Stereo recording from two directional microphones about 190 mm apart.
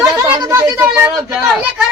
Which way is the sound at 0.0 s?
15° right (ahead or behind).